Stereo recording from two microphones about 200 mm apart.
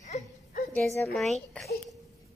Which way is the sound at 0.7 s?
Centre (ahead or behind).